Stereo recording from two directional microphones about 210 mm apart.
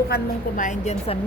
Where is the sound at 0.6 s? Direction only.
35° left (ahead or behind).